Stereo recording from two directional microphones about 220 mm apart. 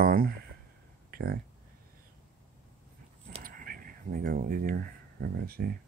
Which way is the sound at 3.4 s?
40° right (ahead or behind).